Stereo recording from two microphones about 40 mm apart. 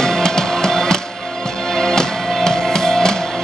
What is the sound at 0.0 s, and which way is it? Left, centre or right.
Music, centre.